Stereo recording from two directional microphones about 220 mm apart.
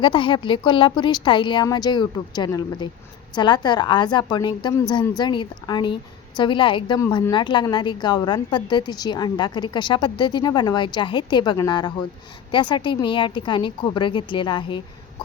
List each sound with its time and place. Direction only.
0.0 s a woman's voice: 20° left (ahead or behind)